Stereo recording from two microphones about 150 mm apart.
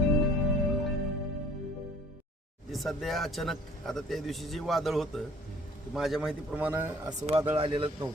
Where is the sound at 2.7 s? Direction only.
Centre (ahead or behind).